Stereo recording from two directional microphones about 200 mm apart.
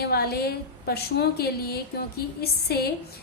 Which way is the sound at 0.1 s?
50° left (ahead or behind).